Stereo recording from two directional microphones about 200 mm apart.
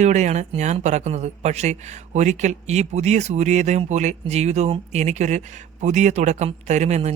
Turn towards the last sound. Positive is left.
turn(degrees=-35)  # may be behind; listen again after turning